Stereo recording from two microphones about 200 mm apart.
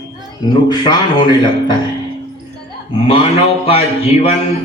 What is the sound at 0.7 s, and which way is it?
Music, 20° left (ahead or behind).